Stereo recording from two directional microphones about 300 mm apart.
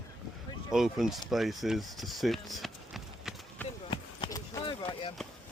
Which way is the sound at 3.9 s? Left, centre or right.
Centre.